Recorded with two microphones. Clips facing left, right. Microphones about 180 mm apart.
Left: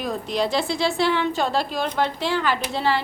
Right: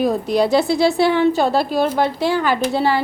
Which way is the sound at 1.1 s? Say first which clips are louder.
Right 7 dB; 35° right (ahead or behind).